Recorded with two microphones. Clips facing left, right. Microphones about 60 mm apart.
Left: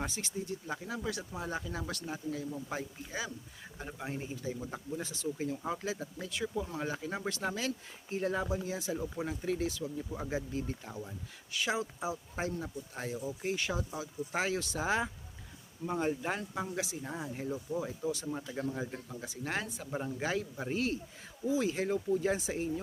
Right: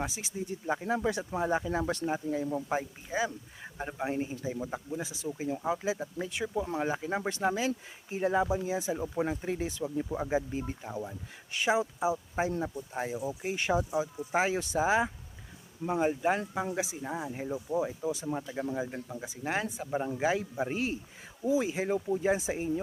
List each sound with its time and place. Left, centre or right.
0.0 s speech: centre
0.3 s speech: right
4.7 s speech: centre; by 10.2 s right
10.2 s speech: right